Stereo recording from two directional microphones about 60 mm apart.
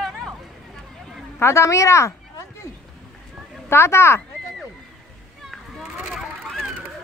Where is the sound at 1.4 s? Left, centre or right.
Left.